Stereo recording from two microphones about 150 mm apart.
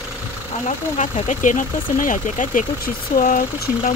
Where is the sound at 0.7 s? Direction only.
55° left (ahead or behind).